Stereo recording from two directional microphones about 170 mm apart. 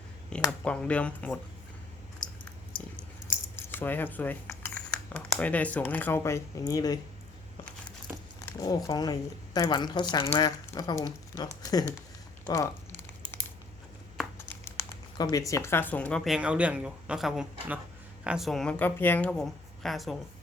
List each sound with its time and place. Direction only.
0.3 s speech: 5° left (ahead or behind)
3.5 s speech: 15° left (ahead or behind)
8.4 s speech: 20° left (ahead or behind)
12.5 s a sound: 20° left (ahead or behind)
14.2 s speech: 10° left (ahead or behind)